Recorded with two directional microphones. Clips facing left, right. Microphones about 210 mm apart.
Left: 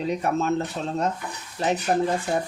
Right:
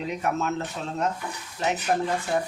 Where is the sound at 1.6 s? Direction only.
35° left (ahead or behind).